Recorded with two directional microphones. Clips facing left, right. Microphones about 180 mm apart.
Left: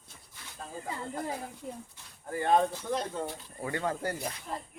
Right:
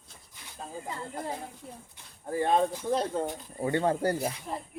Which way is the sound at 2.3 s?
25° right (ahead or behind).